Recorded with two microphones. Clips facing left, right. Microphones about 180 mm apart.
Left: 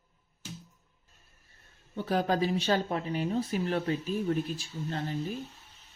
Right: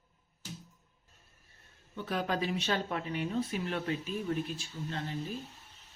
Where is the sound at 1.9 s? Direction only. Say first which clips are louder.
Left 5 dB; 35° left (ahead or behind).